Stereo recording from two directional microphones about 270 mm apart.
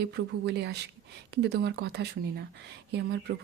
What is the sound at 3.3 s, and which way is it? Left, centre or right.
Speech, right.